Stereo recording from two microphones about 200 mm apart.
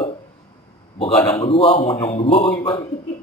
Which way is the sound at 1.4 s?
30° left (ahead or behind).